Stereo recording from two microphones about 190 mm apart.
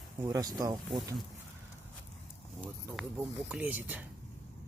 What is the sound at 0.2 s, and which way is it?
Speech, 20° right (ahead or behind).